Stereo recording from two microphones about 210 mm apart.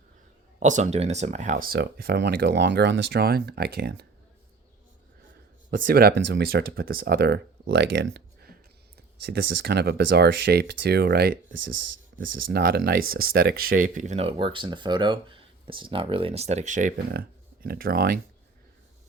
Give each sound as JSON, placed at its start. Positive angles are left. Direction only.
{"t": 0.6, "sound": "speech", "side_deg": -35}
{"t": 5.7, "sound": "speech", "side_deg": -45}